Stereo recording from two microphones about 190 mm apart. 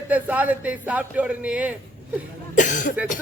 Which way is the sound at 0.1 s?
10° right (ahead or behind).